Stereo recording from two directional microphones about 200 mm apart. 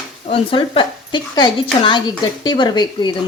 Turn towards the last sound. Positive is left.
turn(degrees=20)  # may be behind; listen again after turning